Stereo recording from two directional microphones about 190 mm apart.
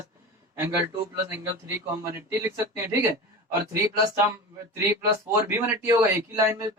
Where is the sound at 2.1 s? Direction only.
15° right (ahead or behind).